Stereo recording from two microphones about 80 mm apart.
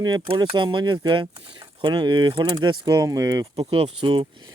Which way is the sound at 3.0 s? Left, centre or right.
Right.